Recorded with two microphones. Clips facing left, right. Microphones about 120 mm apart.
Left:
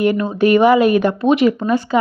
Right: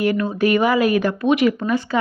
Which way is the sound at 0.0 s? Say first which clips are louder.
Left 3 dB; 25° left (ahead or behind).